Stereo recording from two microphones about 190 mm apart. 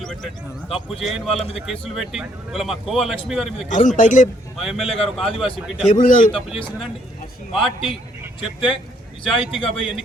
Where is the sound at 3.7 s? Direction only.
40° left (ahead or behind).